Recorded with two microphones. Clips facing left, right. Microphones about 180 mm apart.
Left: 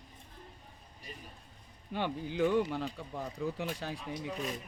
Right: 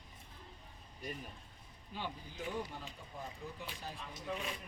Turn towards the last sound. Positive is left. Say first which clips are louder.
# left 6 dB
turn(degrees=40)  # may be behind; listen again after turning